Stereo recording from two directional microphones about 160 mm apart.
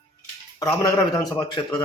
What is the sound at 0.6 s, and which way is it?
A man's voice, 20° left (ahead or behind).